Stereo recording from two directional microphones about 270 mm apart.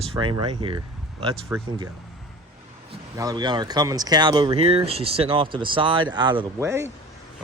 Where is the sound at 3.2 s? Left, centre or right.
Centre.